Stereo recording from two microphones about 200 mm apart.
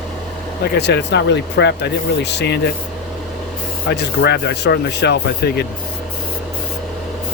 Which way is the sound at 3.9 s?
55° left (ahead or behind).